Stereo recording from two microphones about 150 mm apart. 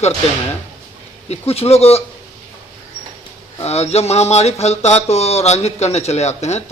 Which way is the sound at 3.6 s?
45° left (ahead or behind).